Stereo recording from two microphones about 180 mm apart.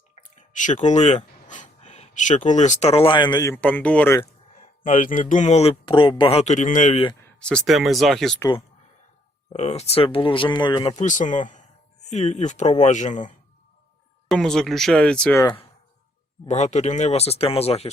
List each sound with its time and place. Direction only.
0.2 s speech: 45° left (ahead or behind); by 3.5 s 25° left (ahead or behind)
3.5 s speech: 10° left (ahead or behind)
4.6 s speech: 45° left (ahead or behind)
7.3 s speech: 5° left (ahead or behind)
9.5 s speech: 35° left (ahead or behind)
10.9 s speech: 45° left (ahead or behind)
14.3 s speech: 5° left (ahead or behind)
15.4 s speech: 25° left (ahead or behind)
16.5 s speech: 40° left (ahead or behind)